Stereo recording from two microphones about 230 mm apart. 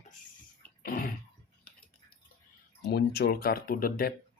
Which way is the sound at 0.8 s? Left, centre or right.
Left.